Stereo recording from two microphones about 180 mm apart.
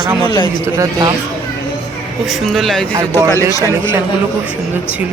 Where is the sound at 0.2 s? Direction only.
25° left (ahead or behind).